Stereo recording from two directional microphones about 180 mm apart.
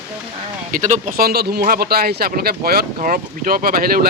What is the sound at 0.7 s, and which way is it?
Speech, 45° right (ahead or behind).